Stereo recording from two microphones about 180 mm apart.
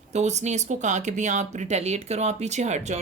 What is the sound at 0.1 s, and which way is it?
Speech, 40° right (ahead or behind).